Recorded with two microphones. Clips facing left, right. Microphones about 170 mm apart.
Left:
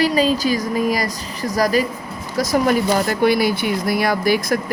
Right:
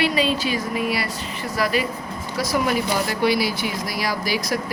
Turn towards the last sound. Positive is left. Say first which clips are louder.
# left 6 dB
turn(degrees=50)  # may be behind; listen again after turning